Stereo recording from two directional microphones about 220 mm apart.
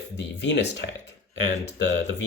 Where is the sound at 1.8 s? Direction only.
50° left (ahead or behind).